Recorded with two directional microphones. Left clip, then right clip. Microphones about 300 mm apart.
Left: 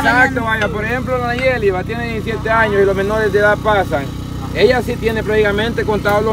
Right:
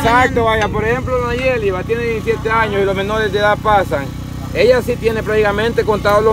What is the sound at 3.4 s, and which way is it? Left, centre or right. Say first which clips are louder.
Speech: right 1 dB; right.